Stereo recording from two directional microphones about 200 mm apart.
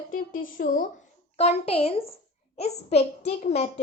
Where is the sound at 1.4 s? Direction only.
30° left (ahead or behind).